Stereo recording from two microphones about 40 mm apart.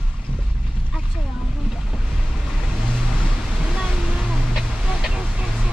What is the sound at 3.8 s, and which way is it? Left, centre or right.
Vehicle, centre.